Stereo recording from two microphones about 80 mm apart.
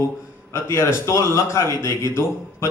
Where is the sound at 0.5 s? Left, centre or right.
Left.